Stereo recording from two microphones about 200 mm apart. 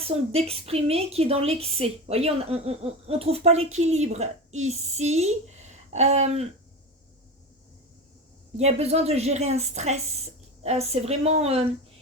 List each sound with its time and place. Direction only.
0.0 s a woman's voice: 30° right (ahead or behind)
8.5 s a woman's voice: 30° right (ahead or behind)